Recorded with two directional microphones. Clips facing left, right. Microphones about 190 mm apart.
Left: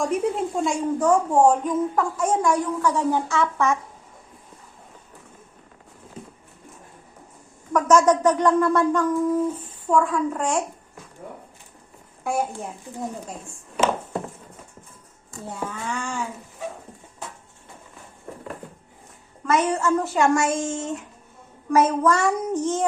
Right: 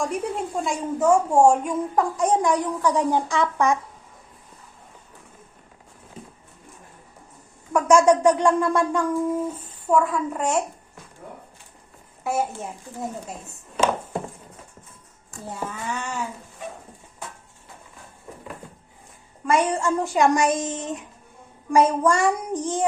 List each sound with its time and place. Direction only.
0.0 s a woman's voice: centre (ahead or behind); by 3.8 s 15° right (ahead or behind)
7.7 s a woman's voice: 10° right (ahead or behind)
12.2 s a woman's voice: 5° right (ahead or behind)
13.8 s a sound: 10° left (ahead or behind)
15.6 s a woman's voice: 5° right (ahead or behind)
19.5 s a woman's voice: 15° right (ahead or behind)